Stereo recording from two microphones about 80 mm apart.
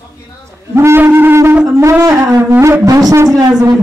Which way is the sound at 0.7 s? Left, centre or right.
Right.